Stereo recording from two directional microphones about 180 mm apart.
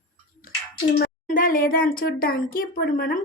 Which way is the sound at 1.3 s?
50° left (ahead or behind).